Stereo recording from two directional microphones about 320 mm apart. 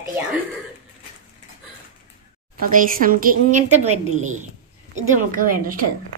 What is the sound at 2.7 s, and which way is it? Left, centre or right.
Speech, right.